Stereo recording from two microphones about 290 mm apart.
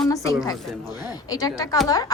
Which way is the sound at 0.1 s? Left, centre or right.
Centre.